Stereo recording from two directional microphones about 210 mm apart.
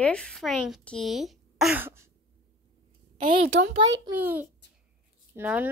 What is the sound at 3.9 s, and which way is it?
A child's voice, 10° right (ahead or behind).